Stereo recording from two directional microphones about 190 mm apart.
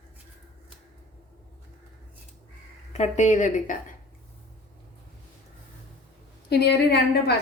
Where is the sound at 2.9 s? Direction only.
40° left (ahead or behind).